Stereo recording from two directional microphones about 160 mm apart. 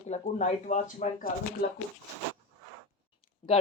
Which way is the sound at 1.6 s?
75° left (ahead or behind).